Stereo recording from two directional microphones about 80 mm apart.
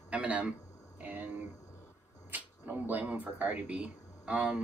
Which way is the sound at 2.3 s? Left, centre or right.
Right.